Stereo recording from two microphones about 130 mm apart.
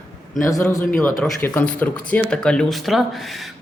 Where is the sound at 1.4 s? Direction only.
15° left (ahead or behind).